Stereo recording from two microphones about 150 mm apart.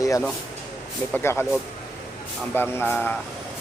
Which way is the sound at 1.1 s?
15° left (ahead or behind).